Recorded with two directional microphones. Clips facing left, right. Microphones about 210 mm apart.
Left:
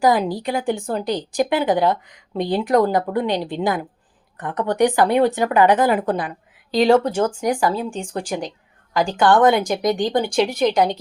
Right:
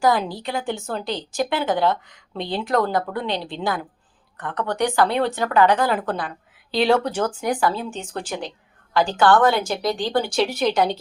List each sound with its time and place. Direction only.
0.4 s speech: 15° left (ahead or behind)